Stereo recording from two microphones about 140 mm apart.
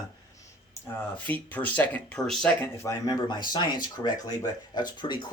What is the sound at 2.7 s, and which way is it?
Speech, 20° left (ahead or behind).